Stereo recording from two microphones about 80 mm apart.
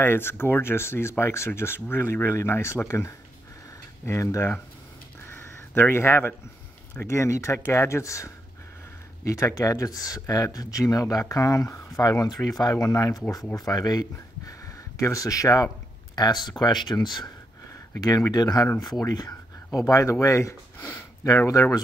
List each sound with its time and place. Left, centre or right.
0.0 s speech: left
5.2 s crow: left
7.0 s speech: left
15.0 s speech: left
16.2 s speech: left
18.3 s speech: left
20.9 s a sound: left
21.5 s speech: left